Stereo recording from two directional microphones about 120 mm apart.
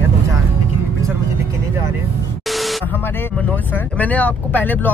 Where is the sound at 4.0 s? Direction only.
15° left (ahead or behind).